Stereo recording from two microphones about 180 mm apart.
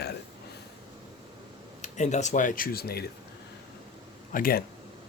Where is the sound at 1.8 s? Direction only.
40° left (ahead or behind); by 3.0 s 60° left (ahead or behind).